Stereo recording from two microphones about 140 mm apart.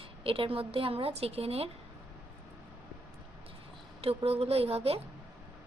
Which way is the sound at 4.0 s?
45° right (ahead or behind).